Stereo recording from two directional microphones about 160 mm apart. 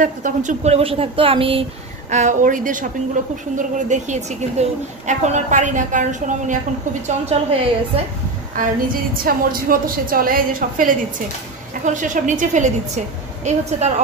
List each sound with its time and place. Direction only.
0.0 s speech: 50° right (ahead or behind); by 2.1 s 35° right (ahead or behind)
2.1 s a woman's voice: 50° right (ahead or behind)
7.2 s speech: 35° right (ahead or behind)
9.2 s a woman's voice: 60° right (ahead or behind); by 13.9 s 45° right (ahead or behind)